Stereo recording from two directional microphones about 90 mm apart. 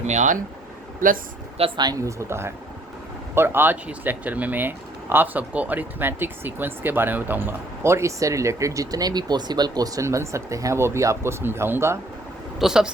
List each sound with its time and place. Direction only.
1.5 s speech: 90° right
2.0 s speech: 30° right (ahead or behind)
12.5 s speech: 5° right (ahead or behind)